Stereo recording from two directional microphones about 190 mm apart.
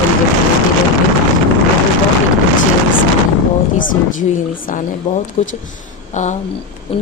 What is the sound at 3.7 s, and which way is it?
A woman's voice, 45° left (ahead or behind).